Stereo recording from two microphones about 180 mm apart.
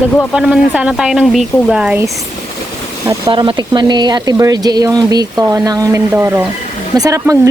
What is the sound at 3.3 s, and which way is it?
Speech, 25° right (ahead or behind).